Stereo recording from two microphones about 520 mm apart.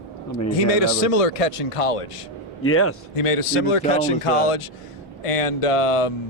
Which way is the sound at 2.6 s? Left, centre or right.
Left.